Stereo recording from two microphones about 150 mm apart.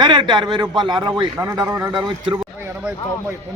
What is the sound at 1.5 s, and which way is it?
Speech, 20° right (ahead or behind).